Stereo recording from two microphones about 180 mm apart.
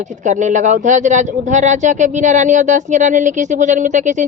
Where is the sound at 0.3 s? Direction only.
45° right (ahead or behind).